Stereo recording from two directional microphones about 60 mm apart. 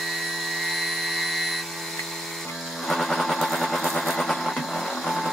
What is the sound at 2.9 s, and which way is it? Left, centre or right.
Vehicle, centre.